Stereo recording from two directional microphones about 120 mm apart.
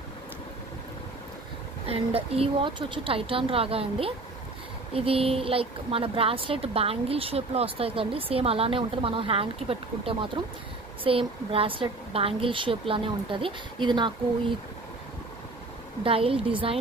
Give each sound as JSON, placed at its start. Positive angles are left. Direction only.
{"t": 1.9, "sound": "a woman's voice", "side_deg": -55}
{"t": 16.0, "sound": "a woman's voice", "side_deg": -50}